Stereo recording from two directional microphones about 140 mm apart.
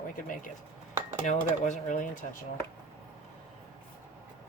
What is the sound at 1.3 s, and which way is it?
Speech, 60° left (ahead or behind).